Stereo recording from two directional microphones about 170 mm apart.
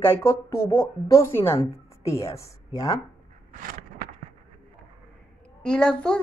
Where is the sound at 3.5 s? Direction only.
55° right (ahead or behind).